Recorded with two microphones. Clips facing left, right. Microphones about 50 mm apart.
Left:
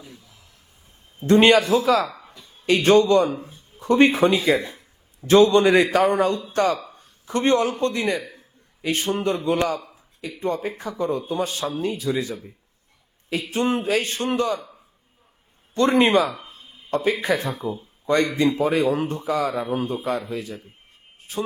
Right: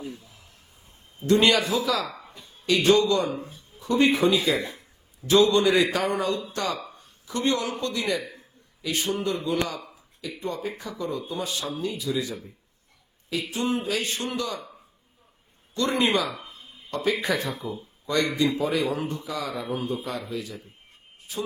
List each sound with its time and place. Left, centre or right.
1.3 s a man's voice: left
2.0 s a sound: centre
2.4 s a man's voice: left
6.9 s a sound: left
7.8 s a man's voice: left
13.5 s a man's voice: left
15.7 s a man's voice: left
16.3 s a sound: centre
16.6 s a man's voice: left